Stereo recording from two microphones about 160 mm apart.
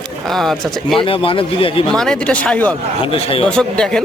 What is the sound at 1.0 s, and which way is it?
Speech, 35° left (ahead or behind).